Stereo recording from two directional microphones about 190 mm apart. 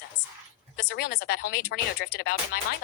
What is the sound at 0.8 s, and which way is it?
A woman's voice, 55° left (ahead or behind).